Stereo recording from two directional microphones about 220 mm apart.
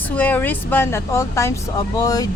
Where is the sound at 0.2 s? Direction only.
5° left (ahead or behind).